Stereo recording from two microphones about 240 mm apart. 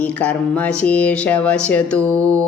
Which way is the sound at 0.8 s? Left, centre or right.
Centre.